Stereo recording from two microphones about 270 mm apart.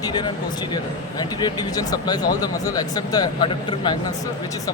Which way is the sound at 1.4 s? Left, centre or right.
Centre.